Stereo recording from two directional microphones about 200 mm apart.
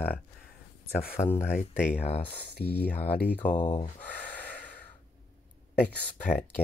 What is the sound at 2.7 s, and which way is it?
Speech, 10° left (ahead or behind).